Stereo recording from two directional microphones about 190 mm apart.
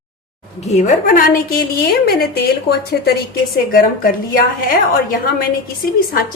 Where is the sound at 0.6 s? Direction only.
35° left (ahead or behind); by 2.3 s 55° left (ahead or behind).